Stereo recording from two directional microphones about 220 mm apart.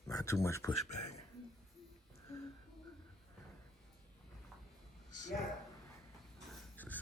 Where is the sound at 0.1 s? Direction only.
15° left (ahead or behind).